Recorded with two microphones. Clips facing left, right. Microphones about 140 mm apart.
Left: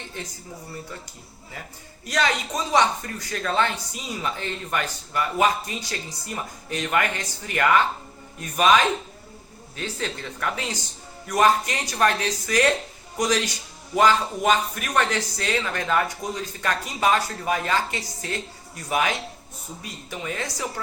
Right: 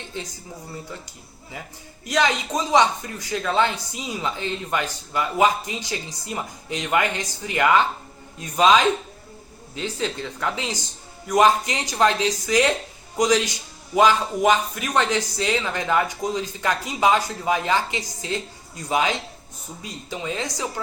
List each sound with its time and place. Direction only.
2.0 s a woman's voice: 15° right (ahead or behind)